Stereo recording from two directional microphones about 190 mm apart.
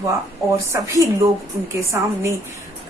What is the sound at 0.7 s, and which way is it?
A woman's voice, 15° right (ahead or behind).